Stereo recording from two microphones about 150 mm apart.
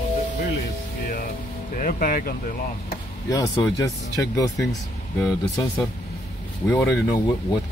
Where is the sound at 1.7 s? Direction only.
65° left (ahead or behind).